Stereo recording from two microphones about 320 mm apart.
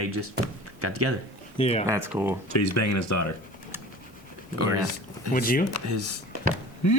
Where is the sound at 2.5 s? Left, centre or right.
Left.